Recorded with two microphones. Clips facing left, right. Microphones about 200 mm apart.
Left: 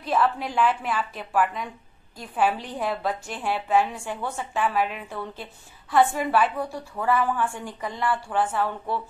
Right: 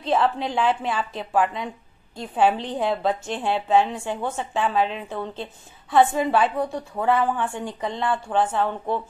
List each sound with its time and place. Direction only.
0.0 s a woman's voice: 25° right (ahead or behind)